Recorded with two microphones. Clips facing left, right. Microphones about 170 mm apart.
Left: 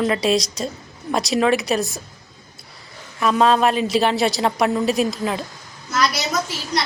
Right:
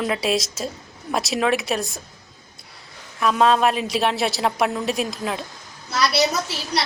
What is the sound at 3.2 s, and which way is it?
A woman's voice, centre (ahead or behind).